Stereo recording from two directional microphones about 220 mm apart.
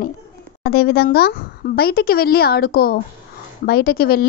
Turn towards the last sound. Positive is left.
turn(degrees=45)  # may be behind; listen again after turning